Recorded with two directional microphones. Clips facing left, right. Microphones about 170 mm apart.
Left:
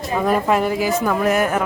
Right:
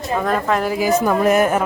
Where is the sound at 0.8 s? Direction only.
20° right (ahead or behind).